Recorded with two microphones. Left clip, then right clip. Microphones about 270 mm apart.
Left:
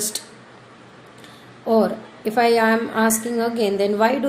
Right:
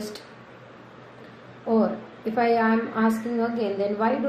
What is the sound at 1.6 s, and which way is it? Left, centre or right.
A woman's voice, left.